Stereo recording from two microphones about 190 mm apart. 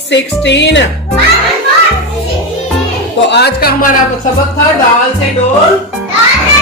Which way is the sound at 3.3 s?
60° left (ahead or behind).